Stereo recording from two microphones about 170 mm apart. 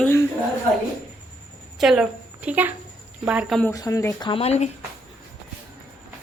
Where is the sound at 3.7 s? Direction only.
20° left (ahead or behind).